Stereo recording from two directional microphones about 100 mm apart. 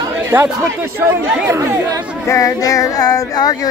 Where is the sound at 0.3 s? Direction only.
25° right (ahead or behind).